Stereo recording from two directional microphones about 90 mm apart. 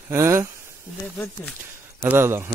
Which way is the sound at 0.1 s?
30° right (ahead or behind).